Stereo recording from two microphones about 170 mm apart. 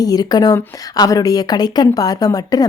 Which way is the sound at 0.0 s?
20° left (ahead or behind).